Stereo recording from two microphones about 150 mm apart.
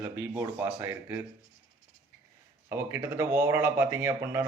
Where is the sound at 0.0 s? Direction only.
15° right (ahead or behind).